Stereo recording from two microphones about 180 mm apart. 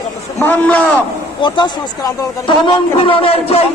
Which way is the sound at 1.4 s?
25° left (ahead or behind).